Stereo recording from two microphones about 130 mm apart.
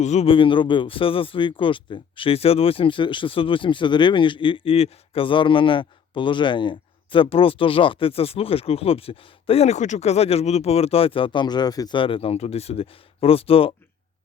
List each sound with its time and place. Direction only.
0.0 s speech: 60° left (ahead or behind)
0.3 s speech: 40° left (ahead or behind)